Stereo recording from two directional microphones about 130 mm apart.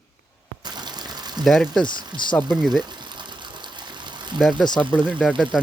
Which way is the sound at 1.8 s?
35° left (ahead or behind).